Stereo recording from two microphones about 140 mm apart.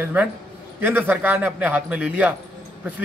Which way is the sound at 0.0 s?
10° right (ahead or behind).